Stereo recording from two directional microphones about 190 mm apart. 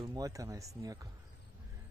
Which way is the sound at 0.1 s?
15° right (ahead or behind).